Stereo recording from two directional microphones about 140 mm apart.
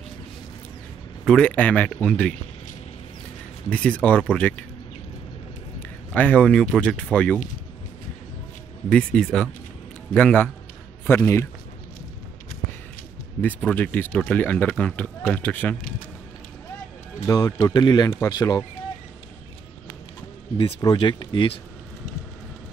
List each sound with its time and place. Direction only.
1.2 s speech: 5° left (ahead or behind)
3.7 s speech: 10° left (ahead or behind)
5.8 s speech: 10° left (ahead or behind)
8.8 s speech: 5° left (ahead or behind)
13.4 s speech: 10° left (ahead or behind)
17.3 s speech: 25° left (ahead or behind)
20.8 s speech: 30° left (ahead or behind)